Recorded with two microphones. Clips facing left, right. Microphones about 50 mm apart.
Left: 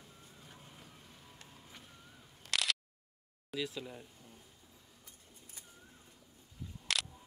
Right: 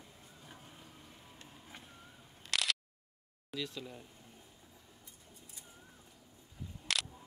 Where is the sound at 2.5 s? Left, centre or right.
Centre.